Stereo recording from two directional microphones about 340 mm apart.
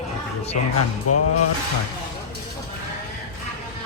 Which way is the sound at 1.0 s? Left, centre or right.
Left.